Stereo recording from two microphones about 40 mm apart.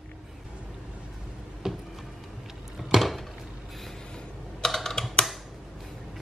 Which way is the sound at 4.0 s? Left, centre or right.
Left.